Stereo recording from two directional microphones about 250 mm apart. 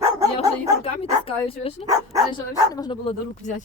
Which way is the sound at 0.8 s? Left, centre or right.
Left.